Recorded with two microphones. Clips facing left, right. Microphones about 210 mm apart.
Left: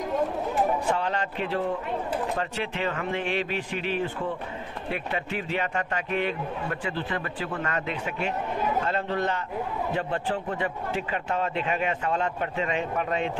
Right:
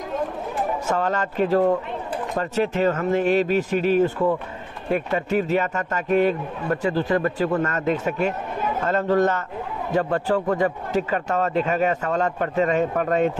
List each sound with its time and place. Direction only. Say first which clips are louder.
0.8 s a man's voice: right 4 dB; 45° right (ahead or behind)